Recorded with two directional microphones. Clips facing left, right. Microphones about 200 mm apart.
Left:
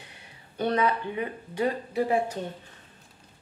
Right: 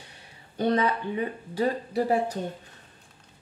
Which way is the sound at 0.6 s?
35° right (ahead or behind).